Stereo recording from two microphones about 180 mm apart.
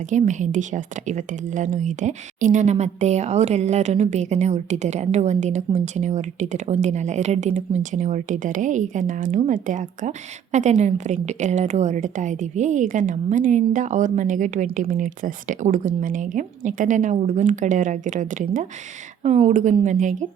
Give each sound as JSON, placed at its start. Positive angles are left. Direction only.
{"t": 0.1, "sound": "a woman's voice", "side_deg": -40}